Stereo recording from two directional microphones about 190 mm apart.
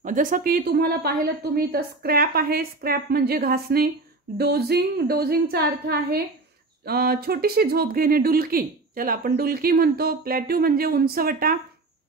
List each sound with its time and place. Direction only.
0.0 s speech: 45° right (ahead or behind)